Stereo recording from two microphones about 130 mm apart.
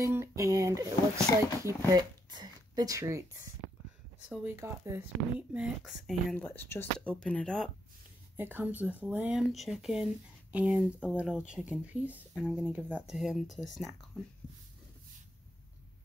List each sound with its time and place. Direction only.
0.0 s speech: 20° right (ahead or behind)
4.5 s speech: 20° right (ahead or behind)
5.5 s speech: 5° right (ahead or behind)
6.3 s speech: 15° left (ahead or behind)
8.4 s speech: 15° right (ahead or behind)